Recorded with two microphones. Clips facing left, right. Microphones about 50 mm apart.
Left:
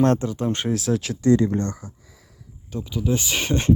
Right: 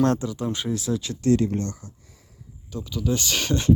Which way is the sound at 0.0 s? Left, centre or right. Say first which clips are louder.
Left 3 dB; left.